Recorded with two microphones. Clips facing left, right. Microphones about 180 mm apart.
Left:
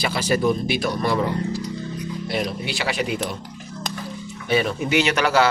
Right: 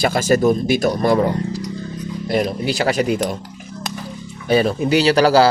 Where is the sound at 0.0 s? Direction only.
45° right (ahead or behind).